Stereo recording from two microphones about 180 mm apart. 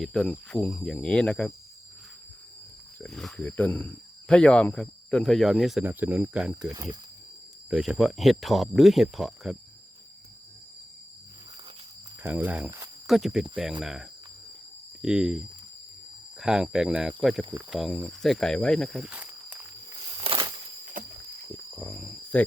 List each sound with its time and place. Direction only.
0.0 s speech: centre (ahead or behind)
3.0 s speech: 5° left (ahead or behind)
7.7 s speech: 5° right (ahead or behind)
12.2 s speech: 10° right (ahead or behind)
20.2 s a sound: 30° right (ahead or behind)
21.5 s cricket: 5° left (ahead or behind)